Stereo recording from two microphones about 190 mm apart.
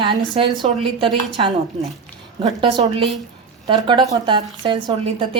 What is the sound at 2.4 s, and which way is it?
Speech, 25° right (ahead or behind).